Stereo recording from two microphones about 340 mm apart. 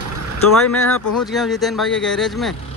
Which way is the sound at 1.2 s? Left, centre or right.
Centre.